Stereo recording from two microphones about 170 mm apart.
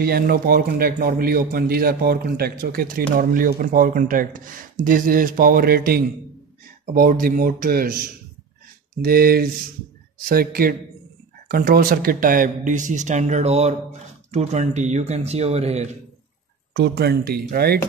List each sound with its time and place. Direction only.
0.0 s a man's voice: 60° right (ahead or behind); by 16.0 s 40° right (ahead or behind)
16.7 s speech: 70° right (ahead or behind)